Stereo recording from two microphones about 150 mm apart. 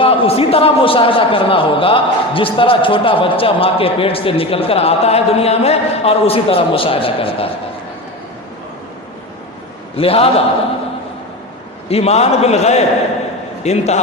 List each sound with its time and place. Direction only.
0.0 s a man's voice: 40° left (ahead or behind)
10.0 s a man's voice: 40° left (ahead or behind)
11.9 s a man's voice: 45° left (ahead or behind)